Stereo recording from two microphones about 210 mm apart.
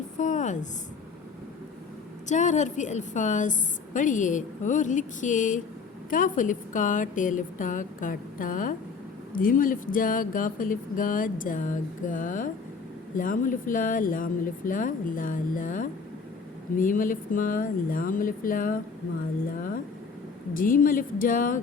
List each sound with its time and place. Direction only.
0.2 s speech: 35° left (ahead or behind)
2.3 s speech: 35° left (ahead or behind)
20.5 s speech: 40° left (ahead or behind)